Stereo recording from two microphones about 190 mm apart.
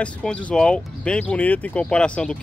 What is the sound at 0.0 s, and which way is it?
Speech, 5° left (ahead or behind).